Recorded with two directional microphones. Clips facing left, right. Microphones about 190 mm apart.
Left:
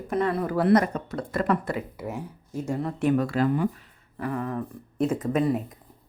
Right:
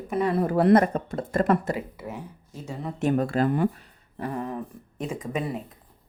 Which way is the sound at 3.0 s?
40° right (ahead or behind).